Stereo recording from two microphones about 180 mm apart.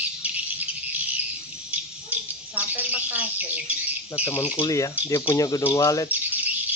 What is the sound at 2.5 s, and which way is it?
Squawk, 10° right (ahead or behind).